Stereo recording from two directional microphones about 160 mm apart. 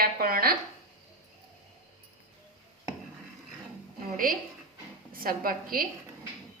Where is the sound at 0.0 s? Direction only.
65° right (ahead or behind).